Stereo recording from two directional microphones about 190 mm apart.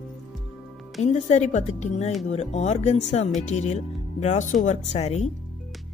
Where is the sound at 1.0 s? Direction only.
35° left (ahead or behind).